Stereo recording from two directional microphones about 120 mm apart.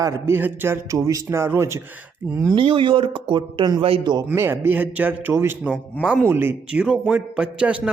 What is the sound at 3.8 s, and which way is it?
Speech, 50° right (ahead or behind).